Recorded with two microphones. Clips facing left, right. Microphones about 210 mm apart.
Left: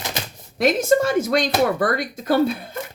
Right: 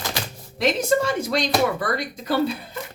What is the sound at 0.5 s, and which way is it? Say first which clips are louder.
A woman's voice: left 3 dB; 50° left (ahead or behind).